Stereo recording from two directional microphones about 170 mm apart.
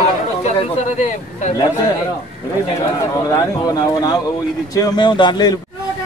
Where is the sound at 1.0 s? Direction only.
45° left (ahead or behind).